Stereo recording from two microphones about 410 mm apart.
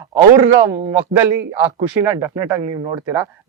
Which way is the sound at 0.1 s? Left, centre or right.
Right.